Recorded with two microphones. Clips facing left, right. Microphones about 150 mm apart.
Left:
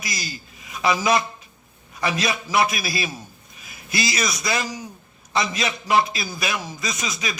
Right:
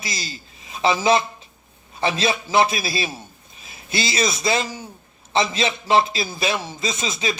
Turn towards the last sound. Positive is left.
turn(degrees=-25)  # may be behind; listen again after turning